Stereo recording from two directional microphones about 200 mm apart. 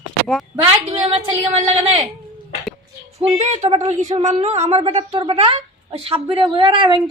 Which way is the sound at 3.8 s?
35° right (ahead or behind).